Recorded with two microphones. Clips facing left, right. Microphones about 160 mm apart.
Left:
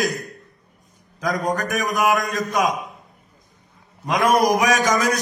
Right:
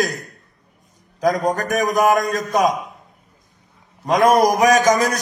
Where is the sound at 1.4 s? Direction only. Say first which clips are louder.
Right 4 dB; 40° right (ahead or behind).